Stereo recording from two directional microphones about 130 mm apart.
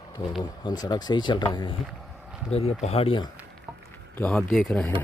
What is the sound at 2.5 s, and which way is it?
Speech, 55° left (ahead or behind).